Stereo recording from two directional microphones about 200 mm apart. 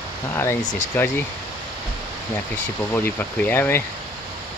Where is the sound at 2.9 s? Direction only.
10° left (ahead or behind).